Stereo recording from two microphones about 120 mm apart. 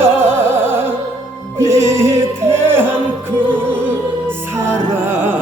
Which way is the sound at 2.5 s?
20° right (ahead or behind).